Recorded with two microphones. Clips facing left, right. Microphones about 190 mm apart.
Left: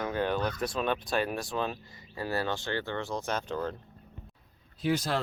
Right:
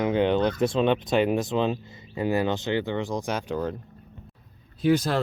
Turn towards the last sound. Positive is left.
turn(degrees=-50)  # may be behind; listen again after turning